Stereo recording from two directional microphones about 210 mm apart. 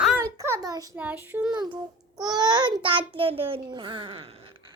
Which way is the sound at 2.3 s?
20° right (ahead or behind).